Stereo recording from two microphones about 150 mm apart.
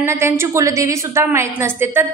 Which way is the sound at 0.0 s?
15° right (ahead or behind).